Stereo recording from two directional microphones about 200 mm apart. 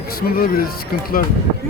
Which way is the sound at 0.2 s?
45° left (ahead or behind).